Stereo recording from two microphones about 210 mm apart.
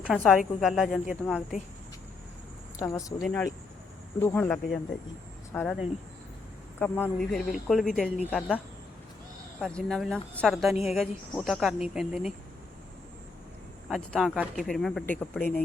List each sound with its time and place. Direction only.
0.1 s a woman's voice: centre (ahead or behind)
2.8 s speech: 10° left (ahead or behind)
3.2 s a woman's voice: centre (ahead or behind)
6.7 s a woman's voice: 10° left (ahead or behind)
9.6 s a woman's voice: 5° left (ahead or behind)
13.9 s a woman's voice: centre (ahead or behind)